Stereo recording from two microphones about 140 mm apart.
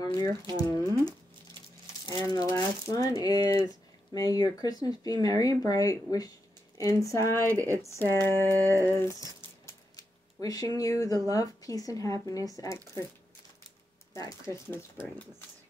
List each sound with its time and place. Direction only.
0.0 s speech: 25° left (ahead or behind)
2.3 s speech: 25° left (ahead or behind)
8.4 s a sound: 20° right (ahead or behind)
8.8 s a sound: 20° left (ahead or behind)
11.2 s speech: 25° left (ahead or behind)
14.1 s speech: 20° left (ahead or behind)